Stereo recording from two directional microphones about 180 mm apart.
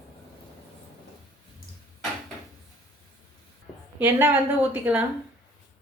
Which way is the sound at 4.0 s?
10° right (ahead or behind).